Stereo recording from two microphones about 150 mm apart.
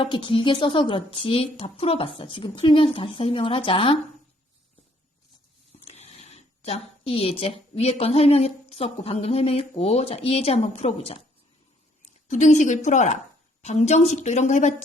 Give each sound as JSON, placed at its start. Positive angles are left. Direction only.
{"t": 0.0, "sound": "a woman's voice", "side_deg": 35}
{"t": 5.8, "sound": "speech", "side_deg": 45}
{"t": 12.3, "sound": "a woman's voice", "side_deg": 55}